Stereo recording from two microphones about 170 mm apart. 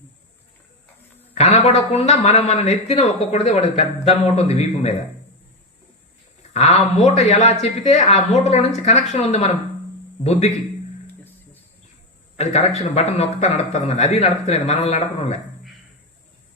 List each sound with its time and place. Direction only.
1.4 s speech: 40° left (ahead or behind)
6.5 s speech: 40° left (ahead or behind)
12.4 s speech: 40° left (ahead or behind)